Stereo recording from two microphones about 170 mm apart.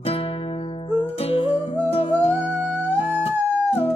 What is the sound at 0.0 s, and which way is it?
Music, 35° left (ahead or behind).